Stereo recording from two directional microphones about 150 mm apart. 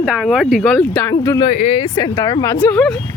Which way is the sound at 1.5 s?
55° left (ahead or behind).